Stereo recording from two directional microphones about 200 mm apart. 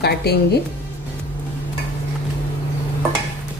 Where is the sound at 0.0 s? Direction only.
55° left (ahead or behind).